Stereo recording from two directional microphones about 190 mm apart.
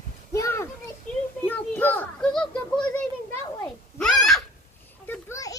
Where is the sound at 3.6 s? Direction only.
5° left (ahead or behind).